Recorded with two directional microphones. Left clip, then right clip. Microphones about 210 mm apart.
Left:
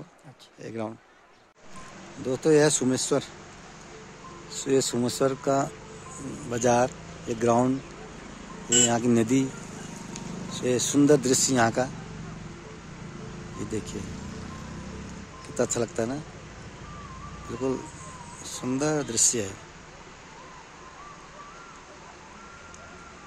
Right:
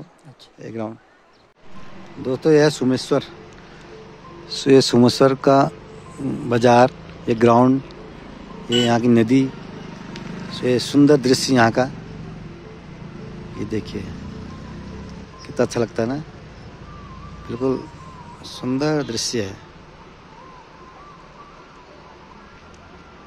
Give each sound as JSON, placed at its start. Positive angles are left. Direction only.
{"t": 0.6, "sound": "speech", "side_deg": -5}
{"t": 2.2, "sound": "speech", "side_deg": -5}
{"t": 4.5, "sound": "speech", "side_deg": -25}
{"t": 8.7, "sound": "speech", "side_deg": -15}
{"t": 10.5, "sound": "speech", "side_deg": -5}
{"t": 13.6, "sound": "speech", "side_deg": -10}
{"t": 15.5, "sound": "speech", "side_deg": -10}
{"t": 17.5, "sound": "speech", "side_deg": -5}